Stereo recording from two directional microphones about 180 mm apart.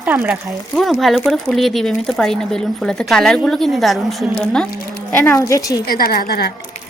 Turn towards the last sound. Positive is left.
turn(degrees=60)  # may be behind; listen again after turning